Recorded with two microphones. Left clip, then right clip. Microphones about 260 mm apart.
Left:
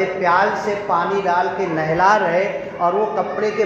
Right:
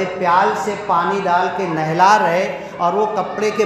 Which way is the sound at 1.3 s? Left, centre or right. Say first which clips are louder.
Right 1 dB; right.